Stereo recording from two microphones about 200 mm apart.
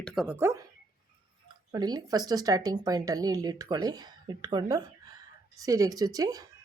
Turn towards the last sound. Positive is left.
turn(degrees=-20)  # may be behind; listen again after turning